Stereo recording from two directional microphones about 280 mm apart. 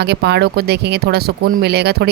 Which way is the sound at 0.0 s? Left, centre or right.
Right.